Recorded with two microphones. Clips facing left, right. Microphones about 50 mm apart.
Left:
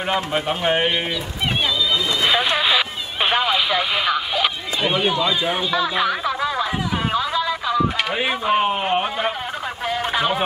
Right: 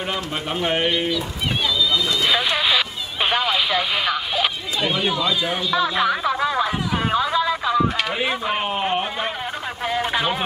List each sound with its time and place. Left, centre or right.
0.1 s speech: centre
2.2 s speech: centre
4.8 s speech: centre
5.8 s speech: centre
8.1 s speech: centre
9.8 s a sound: centre